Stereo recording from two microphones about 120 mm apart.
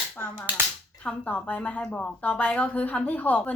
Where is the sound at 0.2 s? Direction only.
15° left (ahead or behind).